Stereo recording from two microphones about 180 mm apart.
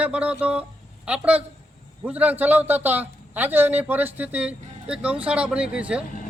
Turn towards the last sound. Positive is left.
turn(degrees=-5)  # may be behind; listen again after turning